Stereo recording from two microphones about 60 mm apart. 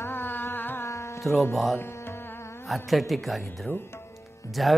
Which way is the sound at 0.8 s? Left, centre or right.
Left.